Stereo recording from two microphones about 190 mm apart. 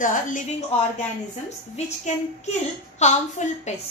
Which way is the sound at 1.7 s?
35° left (ahead or behind).